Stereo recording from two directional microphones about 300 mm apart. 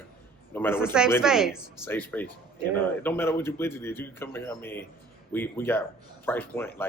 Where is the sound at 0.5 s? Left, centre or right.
Centre.